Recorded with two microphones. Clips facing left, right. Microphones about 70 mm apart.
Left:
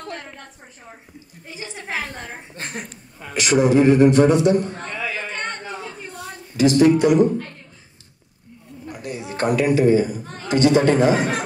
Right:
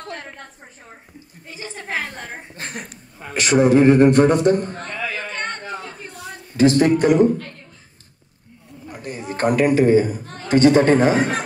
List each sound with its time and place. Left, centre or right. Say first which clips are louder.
1.5 s speech: right 1 dB; right
3.3 s a man's voice: right 2 dB; right
8.9 s speech: right 1 dB; right